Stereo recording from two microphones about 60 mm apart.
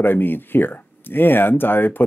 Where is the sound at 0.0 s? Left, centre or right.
Left.